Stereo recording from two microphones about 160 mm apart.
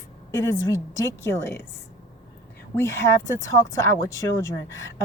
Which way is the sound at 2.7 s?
15° left (ahead or behind).